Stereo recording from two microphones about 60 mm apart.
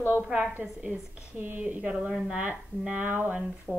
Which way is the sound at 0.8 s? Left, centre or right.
Right.